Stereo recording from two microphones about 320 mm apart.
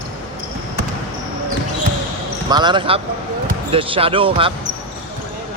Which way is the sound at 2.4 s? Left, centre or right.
Centre.